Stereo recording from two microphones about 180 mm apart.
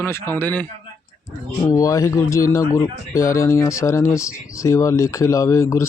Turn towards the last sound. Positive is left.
turn(degrees=15)  # may be behind; listen again after turning